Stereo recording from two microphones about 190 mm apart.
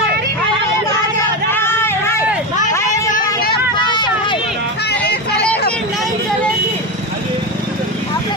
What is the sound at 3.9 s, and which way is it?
Hubbub, 25° left (ahead or behind).